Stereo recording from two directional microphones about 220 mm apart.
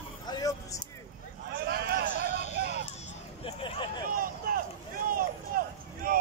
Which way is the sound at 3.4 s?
20° left (ahead or behind).